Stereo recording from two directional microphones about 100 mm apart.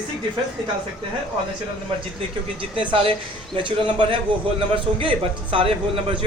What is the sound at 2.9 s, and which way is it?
A woman's voice, 65° right (ahead or behind).